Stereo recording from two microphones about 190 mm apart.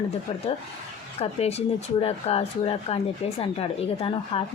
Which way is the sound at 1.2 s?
35° left (ahead or behind).